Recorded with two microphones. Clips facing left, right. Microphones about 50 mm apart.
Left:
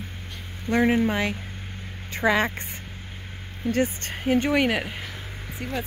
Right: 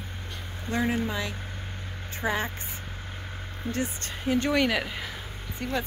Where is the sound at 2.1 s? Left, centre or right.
Left.